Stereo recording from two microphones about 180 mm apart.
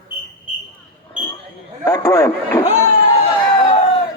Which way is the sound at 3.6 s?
30° left (ahead or behind).